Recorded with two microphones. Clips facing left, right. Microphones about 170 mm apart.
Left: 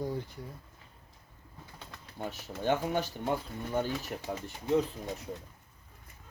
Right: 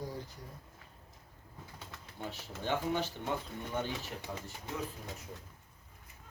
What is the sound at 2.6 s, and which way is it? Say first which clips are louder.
Speech: left 4 dB; 45° left (ahead or behind).